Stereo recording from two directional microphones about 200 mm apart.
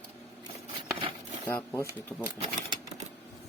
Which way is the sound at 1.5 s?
10° left (ahead or behind).